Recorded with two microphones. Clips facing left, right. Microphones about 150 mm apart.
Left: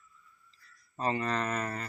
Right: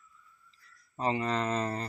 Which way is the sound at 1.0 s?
20° right (ahead or behind).